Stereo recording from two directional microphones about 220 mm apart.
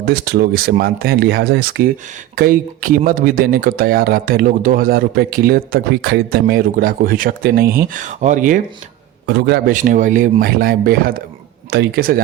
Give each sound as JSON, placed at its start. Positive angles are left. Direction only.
{"t": 0.0, "sound": "speech", "side_deg": -45}
{"t": 9.2, "sound": "speech", "side_deg": -50}